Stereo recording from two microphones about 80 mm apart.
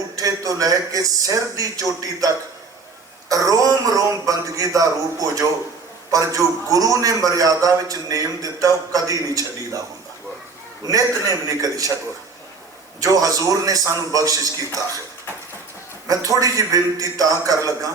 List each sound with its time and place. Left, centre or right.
0.2 s a man's voice: right
10.8 s a man's voice: right
13.0 s a man's voice: right
16.0 s a man's voice: right